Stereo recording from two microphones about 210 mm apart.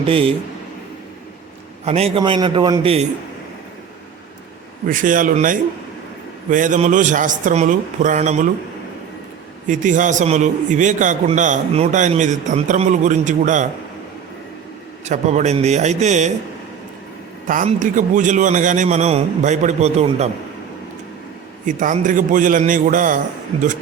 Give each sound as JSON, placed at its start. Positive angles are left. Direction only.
{"t": 0.0, "sound": "a man's voice", "side_deg": -25}
{"t": 1.8, "sound": "a man's voice", "side_deg": -30}
{"t": 4.9, "sound": "a man's voice", "side_deg": -40}
{"t": 9.6, "sound": "a man's voice", "side_deg": -35}
{"t": 15.0, "sound": "a man's voice", "side_deg": -35}
{"t": 17.5, "sound": "a man's voice", "side_deg": -40}
{"t": 21.7, "sound": "a man's voice", "side_deg": -40}